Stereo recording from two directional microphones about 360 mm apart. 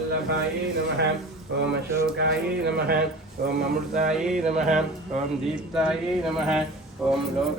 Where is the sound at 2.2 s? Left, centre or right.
Right.